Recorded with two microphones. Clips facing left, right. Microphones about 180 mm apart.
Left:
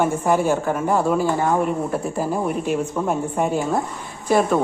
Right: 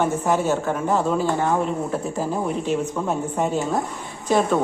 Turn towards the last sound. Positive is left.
turn(degrees=10)  # may be behind; listen again after turning